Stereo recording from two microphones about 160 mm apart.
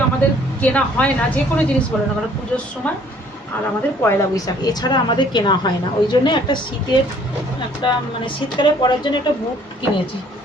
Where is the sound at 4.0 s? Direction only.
20° left (ahead or behind).